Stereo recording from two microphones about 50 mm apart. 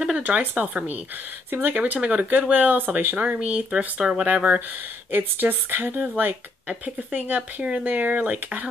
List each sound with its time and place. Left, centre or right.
0.2 s speech: right
1.8 s speech: right
3.7 s speech: centre
5.1 s speech: right